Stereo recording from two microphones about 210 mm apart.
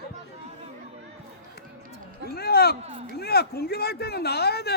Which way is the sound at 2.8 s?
25° right (ahead or behind).